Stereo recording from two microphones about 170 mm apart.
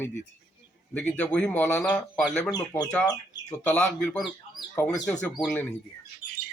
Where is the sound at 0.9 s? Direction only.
10° left (ahead or behind).